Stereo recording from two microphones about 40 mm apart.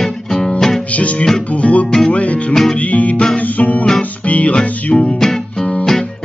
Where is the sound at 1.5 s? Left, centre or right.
Left.